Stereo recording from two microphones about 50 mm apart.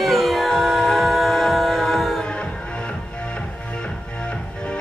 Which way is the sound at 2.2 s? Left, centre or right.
Centre.